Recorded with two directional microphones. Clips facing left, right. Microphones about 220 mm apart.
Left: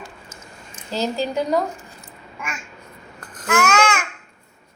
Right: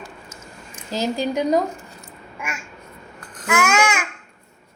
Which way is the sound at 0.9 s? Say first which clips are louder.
Right 1 dB; 15° right (ahead or behind).